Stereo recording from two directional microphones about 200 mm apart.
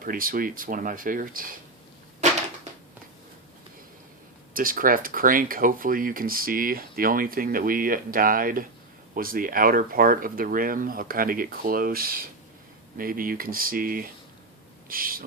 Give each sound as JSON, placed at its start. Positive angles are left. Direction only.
{"t": 0.0, "sound": "speech", "side_deg": -45}
{"t": 4.5, "sound": "speech", "side_deg": -45}
{"t": 14.8, "sound": "owl", "side_deg": -45}